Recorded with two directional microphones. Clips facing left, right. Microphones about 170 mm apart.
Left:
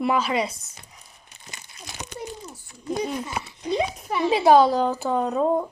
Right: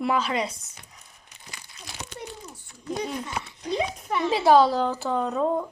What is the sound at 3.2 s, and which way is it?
Speech, 5° left (ahead or behind).